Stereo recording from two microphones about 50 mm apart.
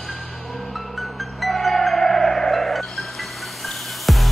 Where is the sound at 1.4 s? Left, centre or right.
Centre.